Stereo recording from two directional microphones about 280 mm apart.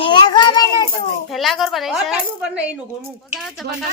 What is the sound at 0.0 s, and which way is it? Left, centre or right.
Child singing, centre.